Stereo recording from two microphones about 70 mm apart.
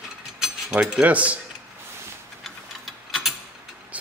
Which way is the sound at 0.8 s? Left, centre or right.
Centre.